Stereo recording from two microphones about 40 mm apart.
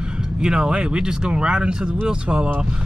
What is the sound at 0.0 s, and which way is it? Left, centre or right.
Speech, right.